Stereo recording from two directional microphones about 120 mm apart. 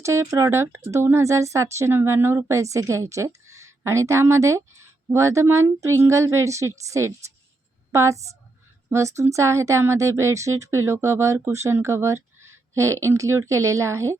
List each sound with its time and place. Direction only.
0.0 s speech: 25° right (ahead or behind)